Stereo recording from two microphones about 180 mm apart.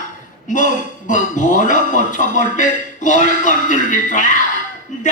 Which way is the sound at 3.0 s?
45° left (ahead or behind).